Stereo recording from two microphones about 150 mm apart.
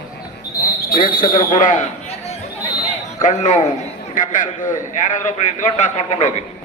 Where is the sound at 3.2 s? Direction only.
55° left (ahead or behind).